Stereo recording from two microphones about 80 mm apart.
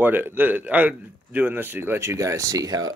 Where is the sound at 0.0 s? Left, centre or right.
Right.